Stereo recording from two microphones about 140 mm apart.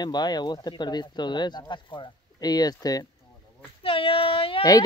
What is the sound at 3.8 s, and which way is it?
Speech, 40° left (ahead or behind).